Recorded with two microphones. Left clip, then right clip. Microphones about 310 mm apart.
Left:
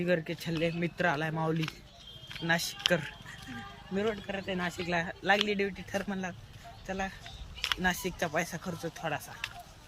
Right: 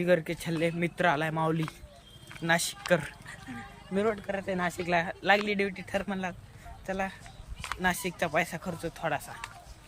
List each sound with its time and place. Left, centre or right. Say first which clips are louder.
0.0 s speech: right 4 dB; centre